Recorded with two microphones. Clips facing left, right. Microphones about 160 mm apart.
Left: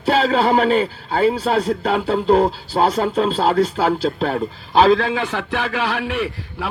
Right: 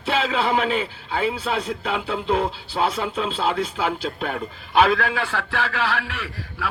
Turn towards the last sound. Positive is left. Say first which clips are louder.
# left 9 dB
turn(degrees=20)  # may be behind; listen again after turning